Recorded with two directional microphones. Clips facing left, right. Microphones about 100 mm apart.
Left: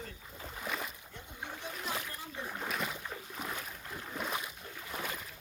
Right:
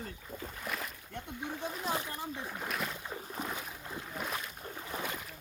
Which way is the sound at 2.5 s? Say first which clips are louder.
Even; centre (ahead or behind).